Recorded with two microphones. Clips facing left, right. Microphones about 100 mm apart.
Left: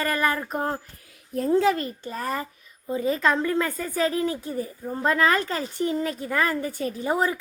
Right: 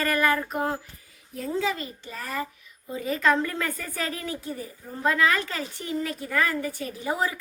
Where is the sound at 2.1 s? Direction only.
35° left (ahead or behind).